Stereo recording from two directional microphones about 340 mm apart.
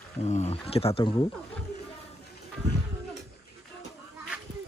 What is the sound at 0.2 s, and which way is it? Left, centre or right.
Speech, centre.